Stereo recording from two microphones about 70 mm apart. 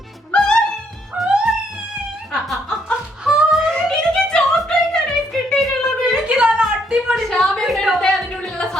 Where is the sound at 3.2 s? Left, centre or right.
Centre.